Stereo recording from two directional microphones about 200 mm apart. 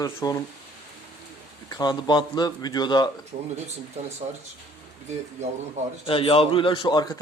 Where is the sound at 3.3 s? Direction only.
35° right (ahead or behind).